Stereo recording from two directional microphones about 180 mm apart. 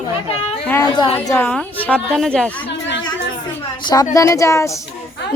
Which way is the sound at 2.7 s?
80° left.